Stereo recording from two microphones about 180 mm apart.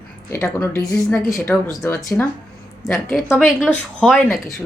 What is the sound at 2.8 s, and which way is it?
Speech, centre (ahead or behind).